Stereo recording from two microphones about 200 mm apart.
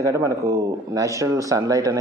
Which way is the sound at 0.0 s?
15° right (ahead or behind).